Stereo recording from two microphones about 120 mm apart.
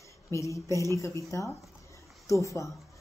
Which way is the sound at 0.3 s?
25° left (ahead or behind).